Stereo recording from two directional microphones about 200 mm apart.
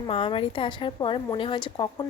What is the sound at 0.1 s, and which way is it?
A woman's voice, 25° left (ahead or behind).